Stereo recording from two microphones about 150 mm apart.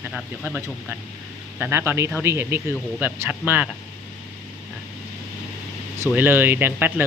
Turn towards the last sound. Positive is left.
turn(degrees=-15)  # may be behind; listen again after turning